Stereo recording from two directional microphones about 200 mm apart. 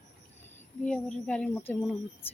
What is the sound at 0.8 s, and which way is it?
Speech, 5° left (ahead or behind).